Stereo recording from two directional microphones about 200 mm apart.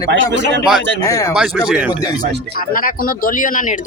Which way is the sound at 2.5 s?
45° left (ahead or behind).